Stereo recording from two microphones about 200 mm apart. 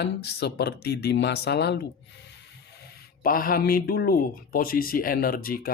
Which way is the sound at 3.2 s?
45° left (ahead or behind).